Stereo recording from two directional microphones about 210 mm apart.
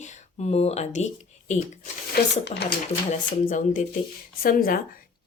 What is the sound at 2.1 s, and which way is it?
Speech, 55° left (ahead or behind).